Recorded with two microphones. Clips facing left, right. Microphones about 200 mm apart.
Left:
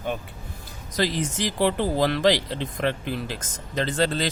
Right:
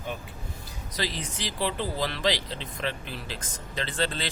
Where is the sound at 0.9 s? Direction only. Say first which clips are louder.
Left 8 dB; 45° left (ahead or behind).